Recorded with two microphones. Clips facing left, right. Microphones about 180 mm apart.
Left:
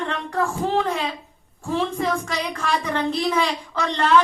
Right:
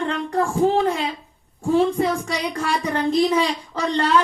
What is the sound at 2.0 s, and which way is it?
Speech, 35° right (ahead or behind).